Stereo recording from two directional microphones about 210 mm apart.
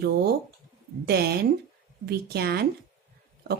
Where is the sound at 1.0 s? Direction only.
50° right (ahead or behind).